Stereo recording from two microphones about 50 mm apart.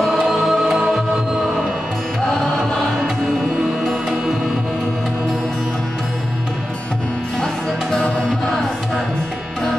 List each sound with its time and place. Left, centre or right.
0.0 s music: centre